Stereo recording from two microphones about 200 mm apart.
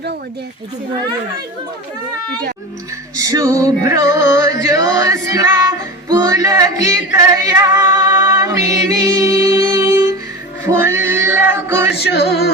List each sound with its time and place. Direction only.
3.2 s male singing: 20° right (ahead or behind)
8.2 s music: 10° right (ahead or behind)
10.6 s male singing: 15° right (ahead or behind)
11.9 s a sound: 55° left (ahead or behind)